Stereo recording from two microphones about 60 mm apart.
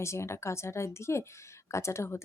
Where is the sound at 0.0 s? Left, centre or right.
Left.